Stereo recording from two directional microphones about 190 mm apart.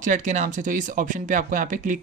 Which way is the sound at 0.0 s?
40° right (ahead or behind).